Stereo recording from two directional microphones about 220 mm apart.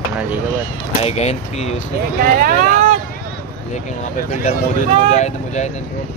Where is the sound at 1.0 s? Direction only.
30° left (ahead or behind).